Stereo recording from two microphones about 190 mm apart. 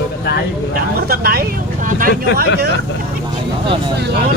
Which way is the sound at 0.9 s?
55° right (ahead or behind).